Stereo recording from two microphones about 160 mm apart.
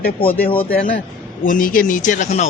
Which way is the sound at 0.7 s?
60° left (ahead or behind).